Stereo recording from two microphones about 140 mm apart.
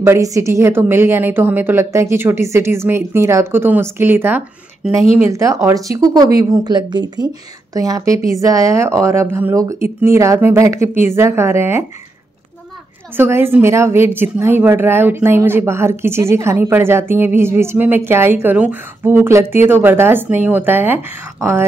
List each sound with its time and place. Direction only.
0.0 s a woman's voice: 20° right (ahead or behind)
13.1 s a woman's voice: 15° right (ahead or behind)